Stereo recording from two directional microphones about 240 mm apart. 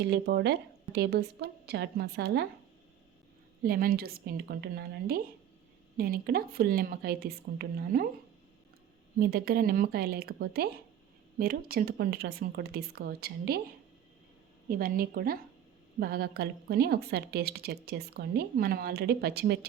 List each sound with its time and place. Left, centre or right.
0.0 s a woman's voice: right
3.6 s a woman's voice: right
9.1 s a woman's voice: right
14.7 s a woman's voice: right